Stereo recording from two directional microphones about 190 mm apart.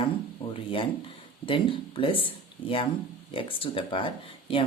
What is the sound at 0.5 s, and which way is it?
Speech, 25° left (ahead or behind).